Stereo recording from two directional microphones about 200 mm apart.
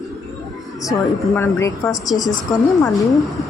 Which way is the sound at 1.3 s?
15° left (ahead or behind).